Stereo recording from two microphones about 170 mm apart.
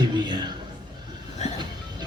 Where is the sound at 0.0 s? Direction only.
25° right (ahead or behind).